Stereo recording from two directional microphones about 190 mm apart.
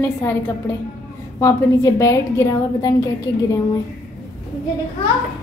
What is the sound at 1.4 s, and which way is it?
Speech, 15° left (ahead or behind).